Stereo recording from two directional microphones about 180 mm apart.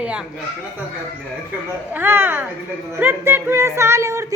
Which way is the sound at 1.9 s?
10° right (ahead or behind).